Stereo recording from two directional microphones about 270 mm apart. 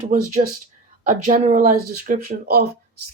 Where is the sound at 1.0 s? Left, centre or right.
Right.